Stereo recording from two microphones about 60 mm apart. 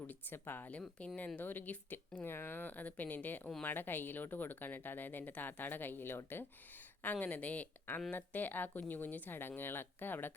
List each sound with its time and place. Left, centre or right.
0.1 s speech: left
0.7 s speech: left
7.0 s speech: left